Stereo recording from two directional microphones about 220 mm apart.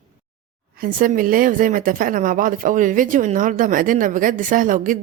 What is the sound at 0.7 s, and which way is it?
A woman's voice, 40° right (ahead or behind).